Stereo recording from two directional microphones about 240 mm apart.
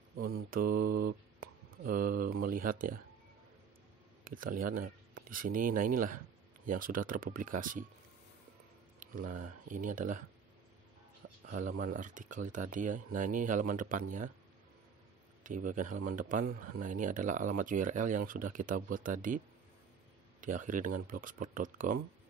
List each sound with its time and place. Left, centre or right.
0.2 s mantra: right
4.2 s speech: right
9.0 s speech: right
11.2 s speech: right
15.4 s speech: right